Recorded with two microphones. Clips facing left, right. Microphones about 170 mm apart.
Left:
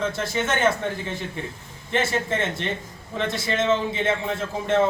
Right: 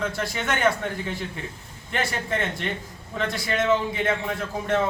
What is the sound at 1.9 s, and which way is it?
A man's voice, 20° left (ahead or behind).